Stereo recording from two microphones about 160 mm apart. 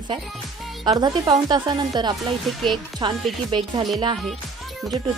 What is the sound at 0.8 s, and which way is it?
Speech, 25° right (ahead or behind).